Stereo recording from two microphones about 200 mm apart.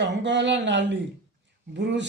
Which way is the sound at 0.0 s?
60° right (ahead or behind).